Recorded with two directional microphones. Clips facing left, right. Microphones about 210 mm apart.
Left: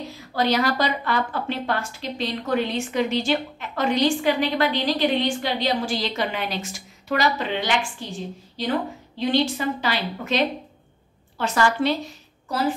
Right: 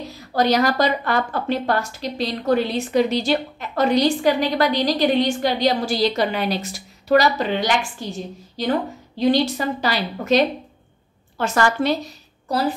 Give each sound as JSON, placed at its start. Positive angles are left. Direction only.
{"t": 0.3, "sound": "a woman's voice", "side_deg": -45}
{"t": 9.2, "sound": "a woman's voice", "side_deg": -40}
{"t": 12.4, "sound": "a woman's voice", "side_deg": -35}